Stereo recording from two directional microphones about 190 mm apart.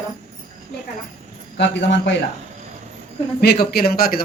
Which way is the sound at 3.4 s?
55° left (ahead or behind).